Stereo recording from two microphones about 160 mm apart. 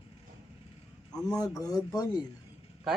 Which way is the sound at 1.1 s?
5° left (ahead or behind).